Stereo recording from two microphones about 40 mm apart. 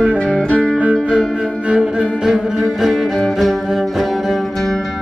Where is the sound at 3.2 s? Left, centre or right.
Centre.